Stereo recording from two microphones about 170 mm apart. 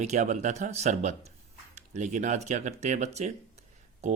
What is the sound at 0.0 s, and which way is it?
Speech, 40° right (ahead or behind).